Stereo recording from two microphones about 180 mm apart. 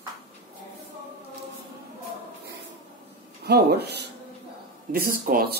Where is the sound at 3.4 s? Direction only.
65° right (ahead or behind).